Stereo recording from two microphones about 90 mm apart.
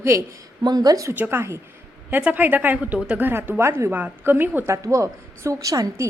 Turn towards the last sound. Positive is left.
turn(degrees=-40)  # may be behind; listen again after turning